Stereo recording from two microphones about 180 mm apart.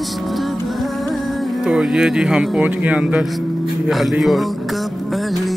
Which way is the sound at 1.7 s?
5° right (ahead or behind).